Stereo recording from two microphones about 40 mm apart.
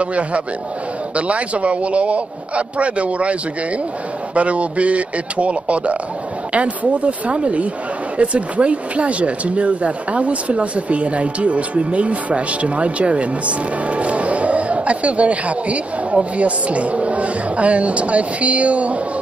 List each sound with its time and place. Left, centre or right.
0.0 s speech: right